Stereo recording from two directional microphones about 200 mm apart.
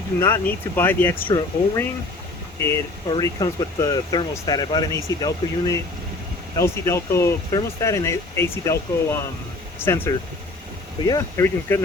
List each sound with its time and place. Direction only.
0.2 s speech: 10° left (ahead or behind)
1.3 s speech: 20° left (ahead or behind)